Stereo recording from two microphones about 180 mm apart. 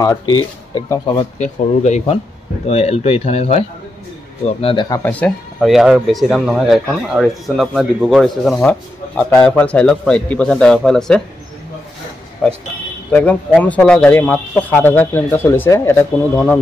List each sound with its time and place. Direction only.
0.0 s speech: 20° left (ahead or behind)
1.4 s speech: 40° left (ahead or behind)
4.8 s speech: 20° left (ahead or behind)
5.2 s speech: centre (ahead or behind)
12.4 s speech: 5° left (ahead or behind)